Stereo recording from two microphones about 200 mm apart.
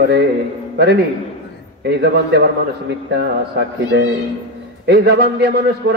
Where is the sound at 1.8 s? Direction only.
55° right (ahead or behind).